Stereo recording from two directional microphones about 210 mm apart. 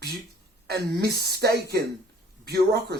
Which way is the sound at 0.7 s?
50° right (ahead or behind).